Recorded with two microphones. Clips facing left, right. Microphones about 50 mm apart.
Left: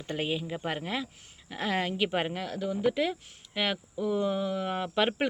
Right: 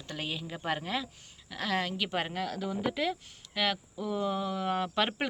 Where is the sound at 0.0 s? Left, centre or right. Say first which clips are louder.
Left 6 dB; left.